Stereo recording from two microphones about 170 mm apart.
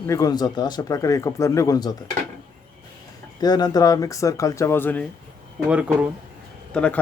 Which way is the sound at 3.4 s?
25° left (ahead or behind).